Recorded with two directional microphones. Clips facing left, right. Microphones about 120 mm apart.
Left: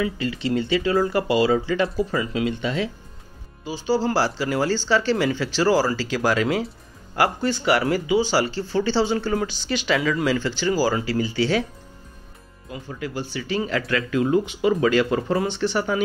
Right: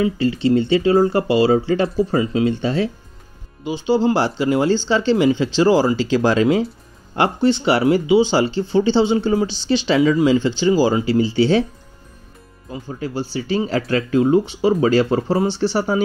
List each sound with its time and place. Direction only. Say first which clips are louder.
0.0 s speech: right 7 dB; 30° right (ahead or behind)
3.6 s speech: right 5 dB; 20° right (ahead or behind)
12.6 s speech: right 4 dB; 30° right (ahead or behind)